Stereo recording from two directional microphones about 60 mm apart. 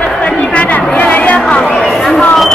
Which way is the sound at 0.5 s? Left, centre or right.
Left.